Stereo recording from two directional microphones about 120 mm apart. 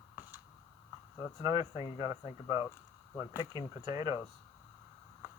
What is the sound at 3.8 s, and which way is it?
Speech, 35° right (ahead or behind).